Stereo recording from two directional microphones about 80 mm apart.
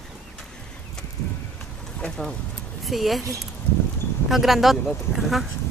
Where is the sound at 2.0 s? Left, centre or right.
Centre.